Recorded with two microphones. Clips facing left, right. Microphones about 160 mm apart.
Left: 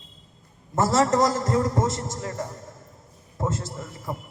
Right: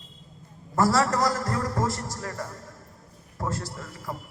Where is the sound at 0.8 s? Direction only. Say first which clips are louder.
Left 2 dB; 20° left (ahead or behind).